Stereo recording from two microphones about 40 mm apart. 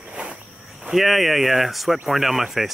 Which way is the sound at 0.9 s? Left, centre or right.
Centre.